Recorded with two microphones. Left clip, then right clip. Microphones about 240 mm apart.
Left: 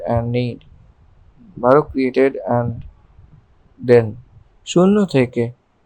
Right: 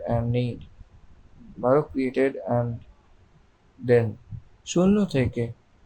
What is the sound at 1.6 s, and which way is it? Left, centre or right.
Speech, centre.